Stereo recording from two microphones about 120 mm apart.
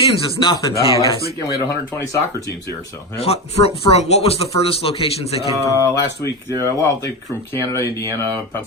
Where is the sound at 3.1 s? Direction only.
60° left (ahead or behind).